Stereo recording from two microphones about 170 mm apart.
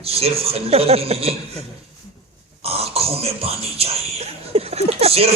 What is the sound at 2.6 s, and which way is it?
Speech, 35° right (ahead or behind).